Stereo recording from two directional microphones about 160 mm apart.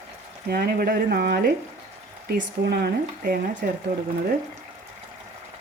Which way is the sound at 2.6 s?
85° right.